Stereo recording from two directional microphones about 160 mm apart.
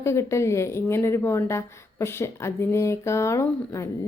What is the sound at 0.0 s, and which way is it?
A woman's voice, 15° left (ahead or behind).